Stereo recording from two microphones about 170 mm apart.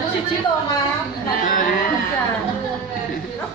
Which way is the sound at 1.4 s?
55° left (ahead or behind).